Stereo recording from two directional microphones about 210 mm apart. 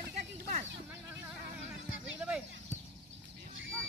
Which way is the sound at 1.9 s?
5° right (ahead or behind).